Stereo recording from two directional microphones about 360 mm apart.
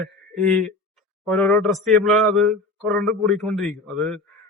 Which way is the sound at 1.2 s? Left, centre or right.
Centre.